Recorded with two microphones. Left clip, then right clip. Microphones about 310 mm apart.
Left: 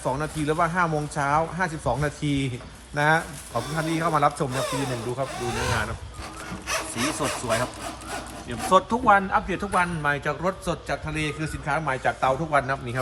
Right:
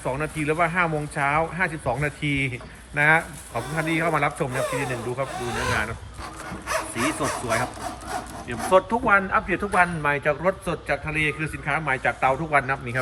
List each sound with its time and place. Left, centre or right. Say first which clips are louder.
0.2 s a man's voice: right 1 dB; centre
2.2 s speech: right 3 dB; left
2.9 s a man's voice: right 3 dB; centre
3.6 s a man's voice: right 2 dB; centre
4.5 s speech: right 2 dB; centre
8.7 s a man's voice: even; centre